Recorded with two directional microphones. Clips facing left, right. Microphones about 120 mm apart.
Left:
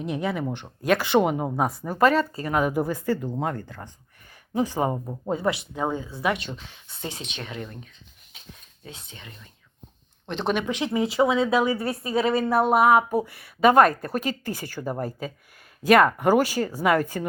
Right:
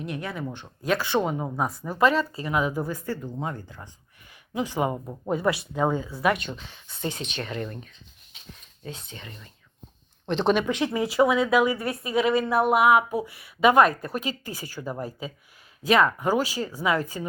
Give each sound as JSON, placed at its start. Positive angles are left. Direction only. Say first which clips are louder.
{"t": 0.9, "sound": "speech", "louder": "left 4 dB", "side_deg": 80}
{"t": 1.8, "sound": "speech", "louder": "left 1 dB", "side_deg": 45}
{"t": 2.7, "sound": "speech", "louder": "left 5 dB", "side_deg": 75}
{"t": 4.5, "sound": "speech", "louder": "left 2 dB", "side_deg": 40}
{"t": 4.9, "sound": "speech", "louder": "left 2 dB", "side_deg": 10}
{"t": 5.3, "sound": "speech", "louder": "right 1 dB", "side_deg": 25}
{"t": 6.2, "sound": "speech", "louder": "right 2 dB", "side_deg": 0}
{"t": 8.8, "sound": "speech", "louder": "right 5 dB", "side_deg": 5}
{"t": 15.9, "sound": "speech", "louder": "left 4 dB", "side_deg": 55}